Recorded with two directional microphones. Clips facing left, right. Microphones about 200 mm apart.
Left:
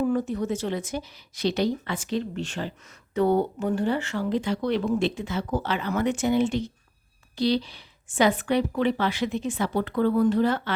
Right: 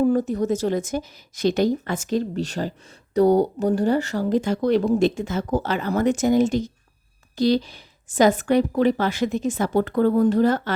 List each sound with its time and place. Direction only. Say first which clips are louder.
0.0 s speech: right 5 dB; 40° right (ahead or behind)